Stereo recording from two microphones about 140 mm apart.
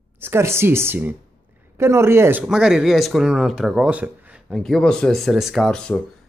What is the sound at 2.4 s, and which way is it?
Speech, 5° right (ahead or behind).